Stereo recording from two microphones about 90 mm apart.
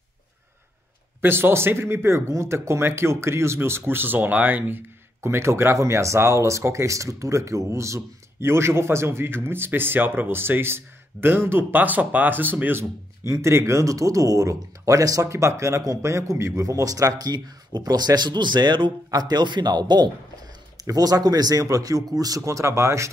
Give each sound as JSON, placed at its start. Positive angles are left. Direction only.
{"t": 1.2, "sound": "speech", "side_deg": -25}
{"t": 13.2, "sound": "a man's voice", "side_deg": -35}